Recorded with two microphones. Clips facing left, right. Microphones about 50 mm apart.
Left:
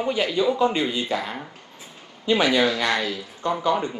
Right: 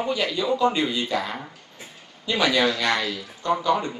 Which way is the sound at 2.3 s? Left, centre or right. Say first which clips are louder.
Left 2 dB; left.